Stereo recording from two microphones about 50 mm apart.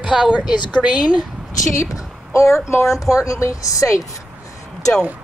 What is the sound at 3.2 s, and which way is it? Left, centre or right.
Speech, left.